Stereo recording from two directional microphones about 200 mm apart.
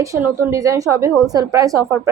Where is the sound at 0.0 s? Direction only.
15° right (ahead or behind).